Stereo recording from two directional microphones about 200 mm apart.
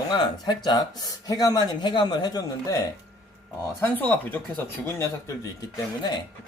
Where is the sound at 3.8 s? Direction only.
10° left (ahead or behind).